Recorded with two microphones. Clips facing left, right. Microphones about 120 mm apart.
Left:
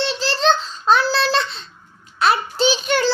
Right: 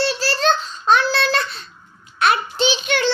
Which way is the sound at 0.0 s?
20° left (ahead or behind).